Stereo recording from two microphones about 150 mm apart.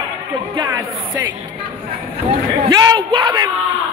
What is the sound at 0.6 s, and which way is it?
Speech, 30° right (ahead or behind).